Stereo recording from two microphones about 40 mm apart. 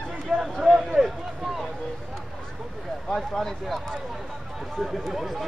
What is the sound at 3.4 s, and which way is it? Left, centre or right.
Speech, centre.